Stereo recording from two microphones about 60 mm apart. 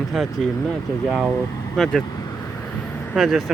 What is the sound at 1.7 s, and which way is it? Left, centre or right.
Speech, centre.